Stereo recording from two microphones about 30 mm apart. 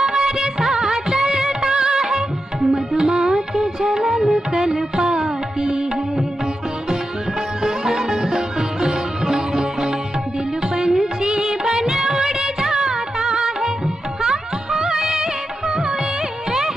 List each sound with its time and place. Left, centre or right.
0.0 s music of bollywood: right
7.6 s music: centre